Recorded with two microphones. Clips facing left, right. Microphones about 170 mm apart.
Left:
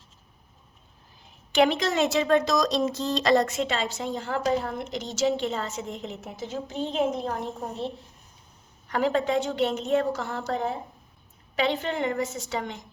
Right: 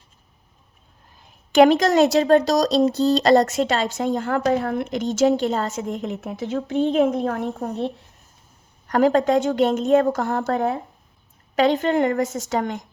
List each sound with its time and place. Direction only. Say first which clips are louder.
1.5 s a woman's voice: right 8 dB; 40° right (ahead or behind)
5.1 s a woman's voice: right 7 dB; 40° right (ahead or behind); by 7.5 s 60° right (ahead or behind)
8.9 s a woman's voice: right 7 dB; 40° right (ahead or behind); by 10.8 s 60° right (ahead or behind)
11.5 s a woman's voice: right 8 dB; 45° right (ahead or behind)